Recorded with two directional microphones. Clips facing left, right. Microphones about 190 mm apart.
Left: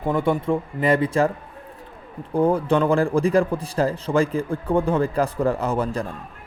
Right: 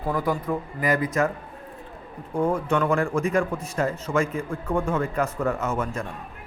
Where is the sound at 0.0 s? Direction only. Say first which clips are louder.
Left 4 dB; 25° left (ahead or behind).